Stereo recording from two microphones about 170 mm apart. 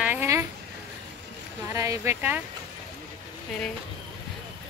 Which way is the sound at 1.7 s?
20° right (ahead or behind).